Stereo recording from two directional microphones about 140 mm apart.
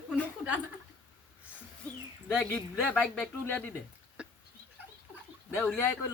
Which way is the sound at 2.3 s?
5° left (ahead or behind).